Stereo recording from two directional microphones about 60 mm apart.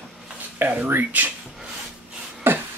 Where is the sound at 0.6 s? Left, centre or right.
Right.